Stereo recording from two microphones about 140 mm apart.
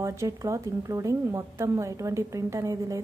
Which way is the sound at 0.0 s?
20° right (ahead or behind).